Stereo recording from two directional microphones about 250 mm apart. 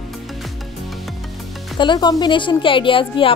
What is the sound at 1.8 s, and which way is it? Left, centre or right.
Speech, centre.